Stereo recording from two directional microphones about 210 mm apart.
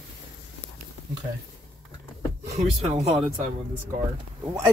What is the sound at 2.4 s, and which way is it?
Speech, 30° right (ahead or behind).